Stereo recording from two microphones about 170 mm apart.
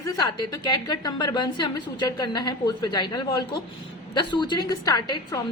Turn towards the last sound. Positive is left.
turn(degrees=20)  # may be behind; listen again after turning